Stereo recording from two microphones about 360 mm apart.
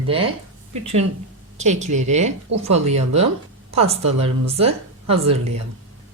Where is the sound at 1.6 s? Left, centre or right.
Centre.